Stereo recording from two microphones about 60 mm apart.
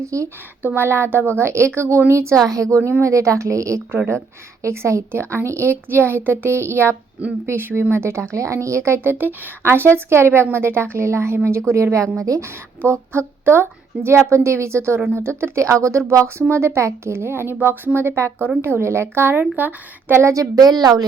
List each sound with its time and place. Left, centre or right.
0.1 s a woman's voice: right
0.6 s a woman's voice: right
2.5 s a woman's voice: right
4.6 s a woman's voice: right
12.1 s a woman's voice: right
12.5 s a woman's voice: right
20.3 s a woman's voice: right